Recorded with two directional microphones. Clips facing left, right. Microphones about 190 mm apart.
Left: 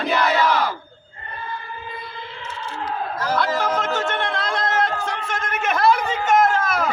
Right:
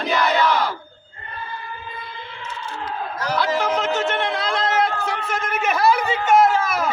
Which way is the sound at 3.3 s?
10° right (ahead or behind).